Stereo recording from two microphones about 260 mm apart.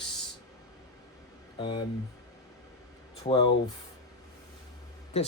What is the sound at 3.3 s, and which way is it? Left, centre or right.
Speech, left.